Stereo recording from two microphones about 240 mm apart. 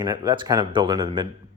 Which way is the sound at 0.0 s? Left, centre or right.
Centre.